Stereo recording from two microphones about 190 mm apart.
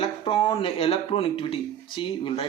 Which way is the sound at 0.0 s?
30° left (ahead or behind).